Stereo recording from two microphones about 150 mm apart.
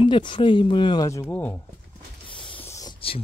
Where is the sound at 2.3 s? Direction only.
35° left (ahead or behind).